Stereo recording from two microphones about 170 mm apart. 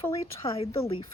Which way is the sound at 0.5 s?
35° left (ahead or behind).